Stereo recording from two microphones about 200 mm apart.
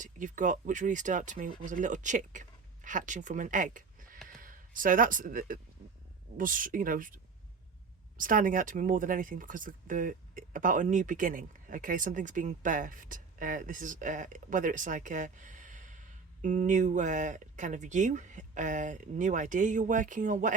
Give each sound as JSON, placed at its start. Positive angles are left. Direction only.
{"t": 0.0, "sound": "speech", "side_deg": -40}
{"t": 8.2, "sound": "speech", "side_deg": -40}